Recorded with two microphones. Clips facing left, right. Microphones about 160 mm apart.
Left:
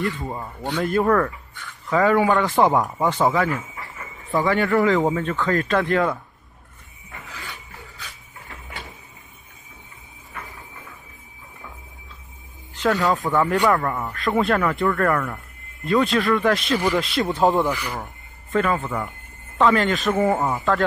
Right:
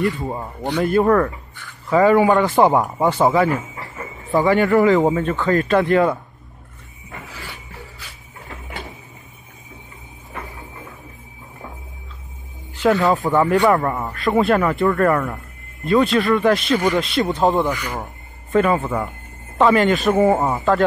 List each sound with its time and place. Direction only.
0.0 s speech: 20° right (ahead or behind)
3.4 s speech: 40° right (ahead or behind)
4.3 s a man's voice: 20° right (ahead or behind)
12.7 s a man's voice: 10° right (ahead or behind)
14.1 s speech: 5° right (ahead or behind)
15.9 s speech: centre (ahead or behind)
18.5 s speech: 10° right (ahead or behind)
19.6 s speech: 10° right (ahead or behind)
20.1 s a man's voice: 20° right (ahead or behind)